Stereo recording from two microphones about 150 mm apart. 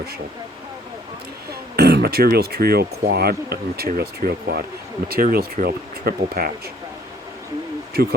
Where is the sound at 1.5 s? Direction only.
90° right.